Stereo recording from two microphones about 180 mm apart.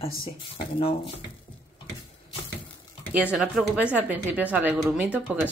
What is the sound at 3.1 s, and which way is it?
A woman's voice, 5° right (ahead or behind).